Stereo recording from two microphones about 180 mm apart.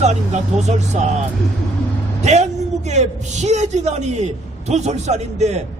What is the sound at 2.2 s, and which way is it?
A man's voice, 40° right (ahead or behind).